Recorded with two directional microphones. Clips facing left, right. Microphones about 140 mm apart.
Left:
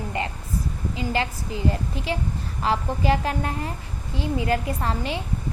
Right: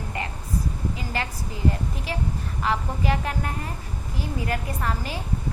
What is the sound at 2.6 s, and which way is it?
Speech, 30° left (ahead or behind).